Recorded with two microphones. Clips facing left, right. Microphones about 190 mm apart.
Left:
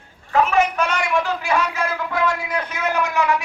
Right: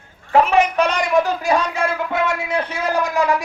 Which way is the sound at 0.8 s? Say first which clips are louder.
Right 4 dB; 40° right (ahead or behind).